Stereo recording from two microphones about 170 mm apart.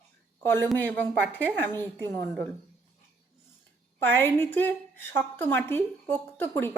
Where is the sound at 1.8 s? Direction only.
25° right (ahead or behind).